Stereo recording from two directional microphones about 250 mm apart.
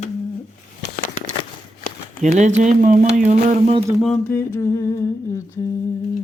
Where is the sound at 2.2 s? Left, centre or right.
Right.